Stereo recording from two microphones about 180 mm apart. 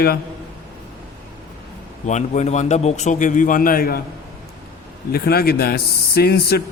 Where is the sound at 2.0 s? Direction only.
40° left (ahead or behind).